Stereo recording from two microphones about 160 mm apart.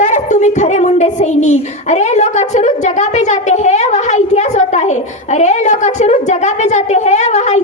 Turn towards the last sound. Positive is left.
turn(degrees=45)  # may be behind; listen again after turning